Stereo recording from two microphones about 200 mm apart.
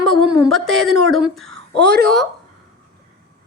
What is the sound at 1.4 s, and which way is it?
Speech, 65° right (ahead or behind).